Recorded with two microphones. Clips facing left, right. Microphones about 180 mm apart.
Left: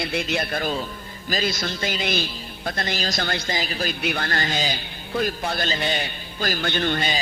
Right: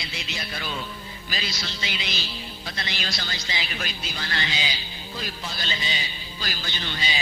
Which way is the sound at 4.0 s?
60° left (ahead or behind).